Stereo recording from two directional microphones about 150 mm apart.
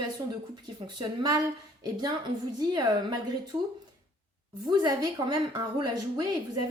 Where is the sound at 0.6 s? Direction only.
30° right (ahead or behind).